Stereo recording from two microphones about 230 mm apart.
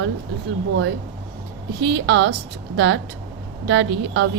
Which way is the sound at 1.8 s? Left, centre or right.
Right.